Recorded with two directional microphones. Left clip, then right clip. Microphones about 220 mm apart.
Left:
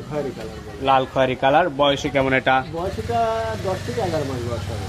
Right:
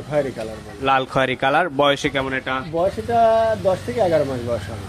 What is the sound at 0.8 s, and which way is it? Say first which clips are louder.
Speech: even; 25° right (ahead or behind).